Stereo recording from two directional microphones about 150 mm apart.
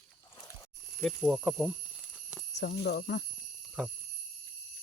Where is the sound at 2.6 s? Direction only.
90° left.